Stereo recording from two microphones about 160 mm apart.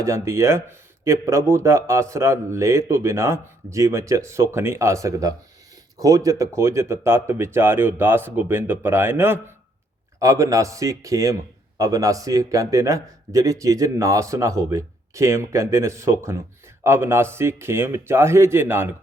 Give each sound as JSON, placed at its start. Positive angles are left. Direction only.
{"t": 0.0, "sound": "a man's voice", "side_deg": -15}